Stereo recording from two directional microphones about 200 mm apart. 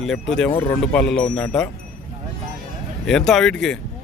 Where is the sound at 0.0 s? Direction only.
Centre (ahead or behind).